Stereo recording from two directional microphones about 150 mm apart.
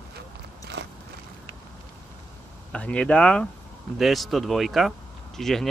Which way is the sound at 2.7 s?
10° left (ahead or behind).